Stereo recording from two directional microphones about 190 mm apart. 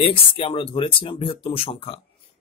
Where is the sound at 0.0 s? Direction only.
30° left (ahead or behind).